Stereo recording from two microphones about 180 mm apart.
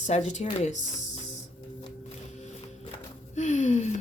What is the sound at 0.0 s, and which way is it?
A woman's voice, 40° left (ahead or behind).